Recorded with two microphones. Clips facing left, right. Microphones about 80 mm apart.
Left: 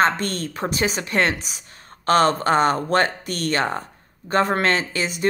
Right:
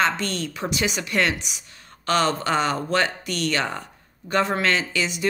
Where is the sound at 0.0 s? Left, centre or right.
Left.